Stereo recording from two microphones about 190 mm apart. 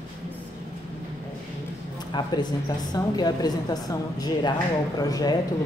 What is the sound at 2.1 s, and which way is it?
Speech, 20° left (ahead or behind).